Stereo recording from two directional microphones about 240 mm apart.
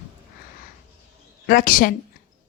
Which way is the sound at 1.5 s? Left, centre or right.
Left.